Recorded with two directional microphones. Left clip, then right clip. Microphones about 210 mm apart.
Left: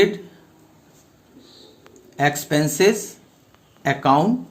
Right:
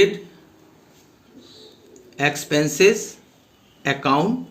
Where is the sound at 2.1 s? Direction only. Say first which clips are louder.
Left 1 dB; 55° left (ahead or behind).